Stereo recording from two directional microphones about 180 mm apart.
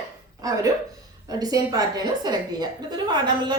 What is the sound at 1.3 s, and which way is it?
A woman's voice, 20° right (ahead or behind).